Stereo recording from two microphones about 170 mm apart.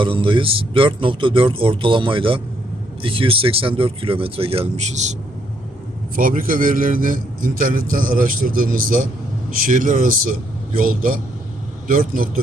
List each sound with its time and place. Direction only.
0.0 s speech: 30° right (ahead or behind)
6.1 s a man's voice: 55° right (ahead or behind)